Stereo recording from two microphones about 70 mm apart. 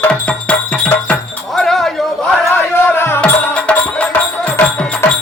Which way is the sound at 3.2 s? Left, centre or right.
Centre.